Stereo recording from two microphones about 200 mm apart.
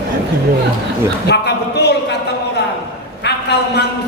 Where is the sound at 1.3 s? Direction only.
55° left (ahead or behind).